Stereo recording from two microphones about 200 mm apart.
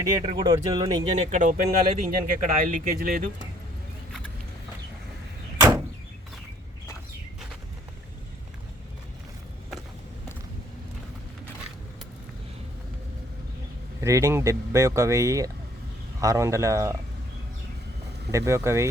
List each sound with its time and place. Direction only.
0.2 s speech: 25° right (ahead or behind)
1.1 s speech: 35° right (ahead or behind)
5.5 s door: 15° right (ahead or behind)
14.0 s speech: 15° right (ahead or behind)
18.3 s speech: 15° right (ahead or behind)